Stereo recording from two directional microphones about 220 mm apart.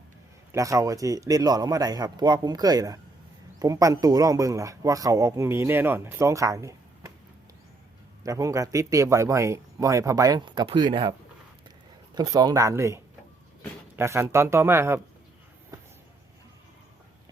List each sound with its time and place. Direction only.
0.5 s speech: 15° right (ahead or behind)
8.2 s speech: 15° right (ahead or behind)
12.1 s speech: 15° right (ahead or behind)